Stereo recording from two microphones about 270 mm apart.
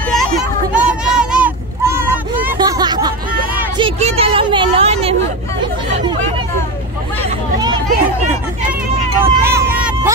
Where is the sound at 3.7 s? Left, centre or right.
Centre.